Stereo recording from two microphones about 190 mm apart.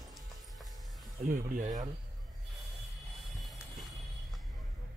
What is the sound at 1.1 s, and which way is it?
Speech, 45° right (ahead or behind).